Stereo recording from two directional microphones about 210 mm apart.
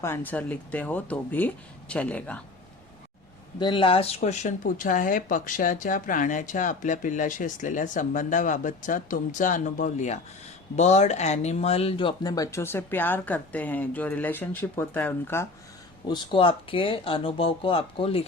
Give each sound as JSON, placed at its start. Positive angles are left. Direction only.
{"t": 0.0, "sound": "speech", "side_deg": 10}
{"t": 3.6, "sound": "speech", "side_deg": 25}
{"t": 16.0, "sound": "speech", "side_deg": 20}